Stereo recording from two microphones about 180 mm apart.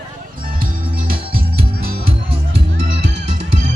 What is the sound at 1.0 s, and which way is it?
Music, 55° right (ahead or behind).